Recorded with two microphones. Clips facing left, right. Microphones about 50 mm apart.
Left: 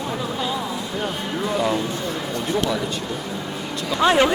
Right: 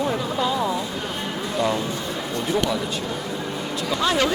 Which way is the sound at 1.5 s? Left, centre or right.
Centre.